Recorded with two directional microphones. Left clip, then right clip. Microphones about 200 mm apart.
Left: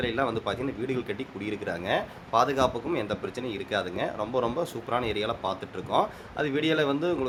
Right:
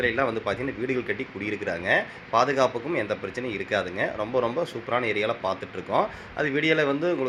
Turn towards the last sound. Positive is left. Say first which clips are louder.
# right 3 dB
turn(degrees=10)  # may be behind; listen again after turning